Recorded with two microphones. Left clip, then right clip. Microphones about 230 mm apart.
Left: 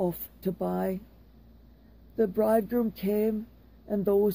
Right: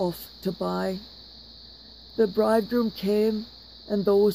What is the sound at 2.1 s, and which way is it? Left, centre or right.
Speech, right.